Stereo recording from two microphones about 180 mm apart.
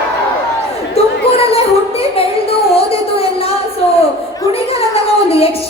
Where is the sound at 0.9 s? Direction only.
35° left (ahead or behind).